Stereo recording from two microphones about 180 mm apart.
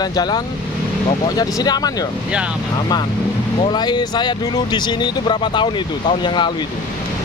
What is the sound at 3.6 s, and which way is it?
Speech, 25° left (ahead or behind).